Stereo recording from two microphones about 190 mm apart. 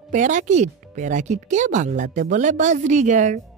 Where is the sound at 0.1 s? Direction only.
40° right (ahead or behind).